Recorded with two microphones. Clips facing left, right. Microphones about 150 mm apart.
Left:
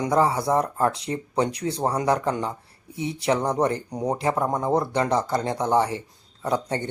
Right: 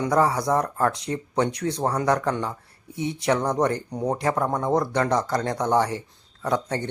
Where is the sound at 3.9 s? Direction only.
10° left (ahead or behind).